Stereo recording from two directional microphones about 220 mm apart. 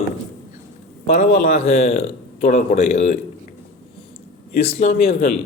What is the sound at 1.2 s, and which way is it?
A man's voice, 30° left (ahead or behind).